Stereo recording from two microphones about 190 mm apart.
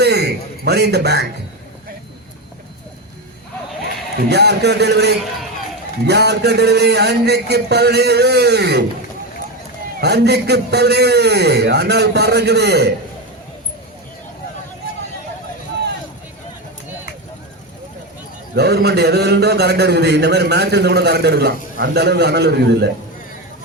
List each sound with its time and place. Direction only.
0.0 s a sound: 60° right (ahead or behind)
4.3 s a man's voice: 60° right (ahead or behind)
10.0 s a man's voice: 60° right (ahead or behind)
18.5 s a man's voice: 60° right (ahead or behind)